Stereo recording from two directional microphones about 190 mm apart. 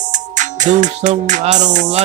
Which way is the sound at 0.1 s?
40° right (ahead or behind).